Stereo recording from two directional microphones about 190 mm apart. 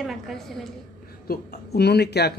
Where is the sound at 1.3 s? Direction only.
55° left (ahead or behind).